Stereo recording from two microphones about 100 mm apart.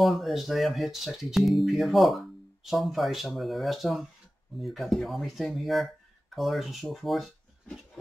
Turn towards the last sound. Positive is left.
turn(degrees=0)  # may be behind; listen again after turning